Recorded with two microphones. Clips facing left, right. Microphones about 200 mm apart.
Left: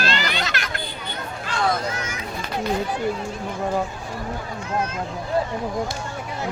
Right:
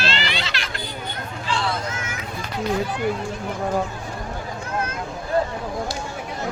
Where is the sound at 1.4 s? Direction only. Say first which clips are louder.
Left 2 dB; 45° left (ahead or behind).